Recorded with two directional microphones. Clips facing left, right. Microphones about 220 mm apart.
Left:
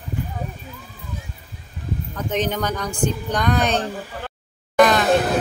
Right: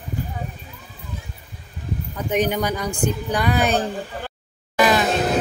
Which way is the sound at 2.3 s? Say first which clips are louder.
Right 2 dB; 10° right (ahead or behind).